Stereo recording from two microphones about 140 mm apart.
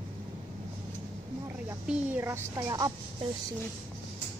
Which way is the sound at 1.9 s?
15° right (ahead or behind).